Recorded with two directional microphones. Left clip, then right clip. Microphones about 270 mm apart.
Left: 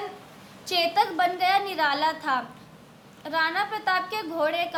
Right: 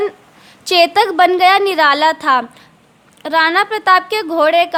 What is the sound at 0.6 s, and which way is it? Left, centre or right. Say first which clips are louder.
A woman's voice: right 12 dB; right.